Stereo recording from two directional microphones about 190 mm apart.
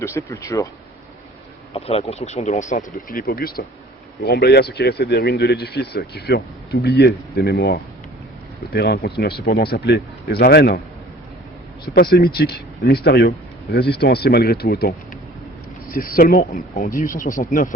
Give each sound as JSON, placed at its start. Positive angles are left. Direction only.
{"t": 0.0, "sound": "speech", "side_deg": 15}
{"t": 1.7, "sound": "speech", "side_deg": 30}
{"t": 12.1, "sound": "speech", "side_deg": 55}